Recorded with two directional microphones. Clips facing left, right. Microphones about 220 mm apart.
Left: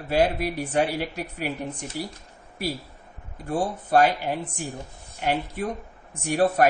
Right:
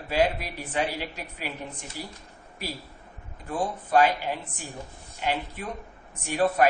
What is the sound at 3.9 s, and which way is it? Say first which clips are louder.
Speech: left 2 dB; 40° left (ahead or behind).